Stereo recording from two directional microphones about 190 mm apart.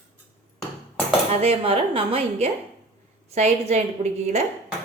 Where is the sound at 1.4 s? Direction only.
30° right (ahead or behind).